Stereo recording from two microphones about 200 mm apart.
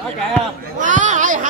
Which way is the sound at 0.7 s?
40° right (ahead or behind).